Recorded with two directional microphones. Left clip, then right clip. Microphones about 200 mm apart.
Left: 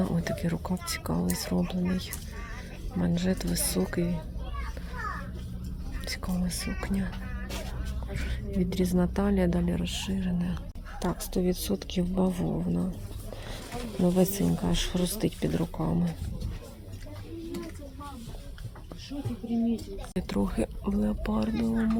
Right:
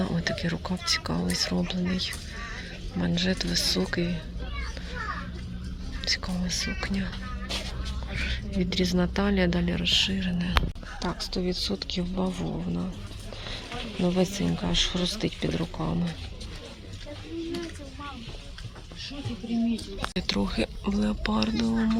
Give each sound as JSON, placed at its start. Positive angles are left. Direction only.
{"t": 0.0, "sound": "a woman's voice", "side_deg": 10}
{"t": 6.0, "sound": "a woman's voice", "side_deg": 15}
{"t": 8.2, "sound": "a woman's voice", "side_deg": 15}
{"t": 11.0, "sound": "speech", "side_deg": 25}
{"t": 14.0, "sound": "speech", "side_deg": 20}
{"t": 20.1, "sound": "a woman's voice", "side_deg": 10}